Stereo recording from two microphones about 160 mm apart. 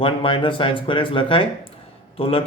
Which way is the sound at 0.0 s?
35° left (ahead or behind).